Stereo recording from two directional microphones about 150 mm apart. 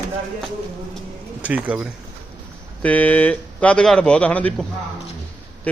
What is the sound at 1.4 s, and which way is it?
Speech, 10° right (ahead or behind).